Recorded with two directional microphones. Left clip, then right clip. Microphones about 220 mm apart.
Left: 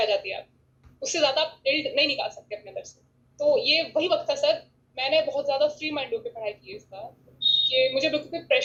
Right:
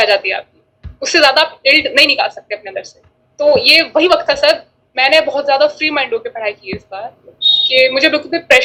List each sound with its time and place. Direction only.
0.0 s speech: 65° right (ahead or behind)